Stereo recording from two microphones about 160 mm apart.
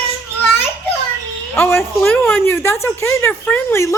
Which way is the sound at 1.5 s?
15° left (ahead or behind).